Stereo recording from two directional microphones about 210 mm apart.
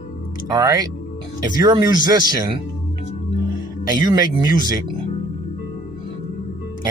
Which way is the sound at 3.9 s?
20° right (ahead or behind).